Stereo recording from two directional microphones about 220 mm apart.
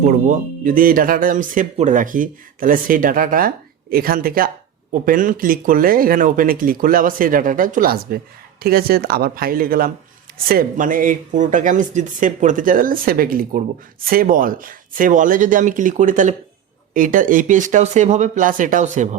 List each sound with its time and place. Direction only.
0.0 s speech: 35° right (ahead or behind)